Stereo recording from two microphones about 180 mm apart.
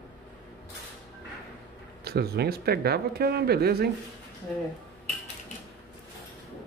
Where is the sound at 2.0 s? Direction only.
60° right (ahead or behind).